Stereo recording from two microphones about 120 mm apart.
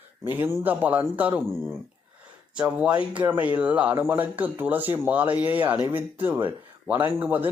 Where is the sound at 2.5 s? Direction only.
10° right (ahead or behind).